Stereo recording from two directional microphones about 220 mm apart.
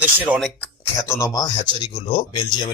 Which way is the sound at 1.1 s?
15° left (ahead or behind).